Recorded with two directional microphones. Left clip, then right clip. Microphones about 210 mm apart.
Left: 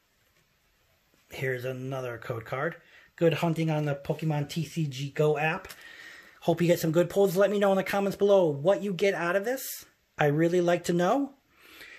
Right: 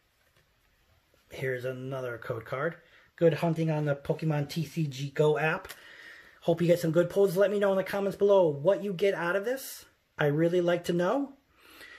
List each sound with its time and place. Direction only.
1.3 s speech: 10° left (ahead or behind)
5.9 s speech: 20° left (ahead or behind)
11.6 s rub: 10° left (ahead or behind)